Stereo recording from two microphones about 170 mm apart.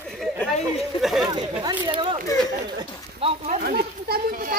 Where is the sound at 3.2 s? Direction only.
45° right (ahead or behind).